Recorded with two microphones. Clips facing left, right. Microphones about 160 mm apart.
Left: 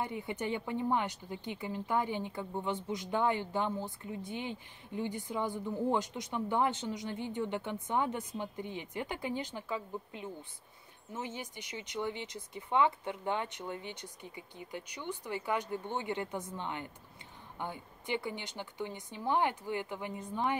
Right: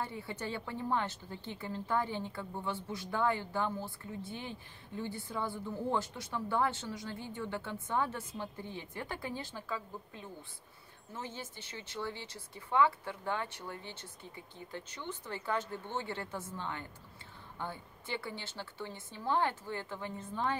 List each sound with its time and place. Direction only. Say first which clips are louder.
0.0 s speech: left 3 dB; 15° left (ahead or behind)